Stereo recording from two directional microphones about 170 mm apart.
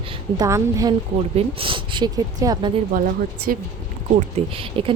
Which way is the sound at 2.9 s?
55° right (ahead or behind).